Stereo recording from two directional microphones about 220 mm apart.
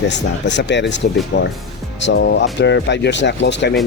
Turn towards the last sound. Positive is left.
turn(degrees=50)  # may be behind; listen again after turning